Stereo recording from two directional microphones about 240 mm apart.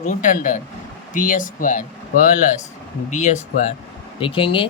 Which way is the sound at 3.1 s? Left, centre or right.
Left.